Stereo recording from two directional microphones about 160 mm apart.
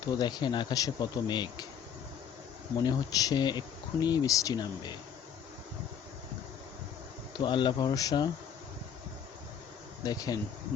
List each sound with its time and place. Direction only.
0.0 s speech: 25° left (ahead or behind)
2.8 s speech: 25° left (ahead or behind)
7.3 s speech: 30° left (ahead or behind)
10.0 s speech: 25° left (ahead or behind)